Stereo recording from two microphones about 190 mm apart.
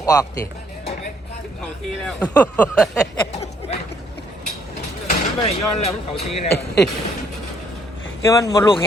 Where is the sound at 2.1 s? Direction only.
5° left (ahead or behind).